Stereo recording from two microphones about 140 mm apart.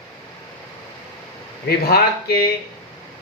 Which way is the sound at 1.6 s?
90° left.